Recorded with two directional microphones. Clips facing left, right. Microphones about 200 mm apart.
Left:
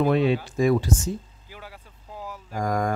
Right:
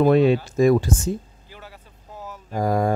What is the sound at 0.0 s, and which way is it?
Speech, 45° right (ahead or behind).